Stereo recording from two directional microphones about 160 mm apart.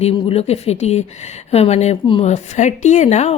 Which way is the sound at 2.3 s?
50° left (ahead or behind).